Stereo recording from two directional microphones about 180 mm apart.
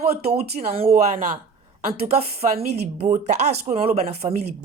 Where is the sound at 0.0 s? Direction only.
35° right (ahead or behind).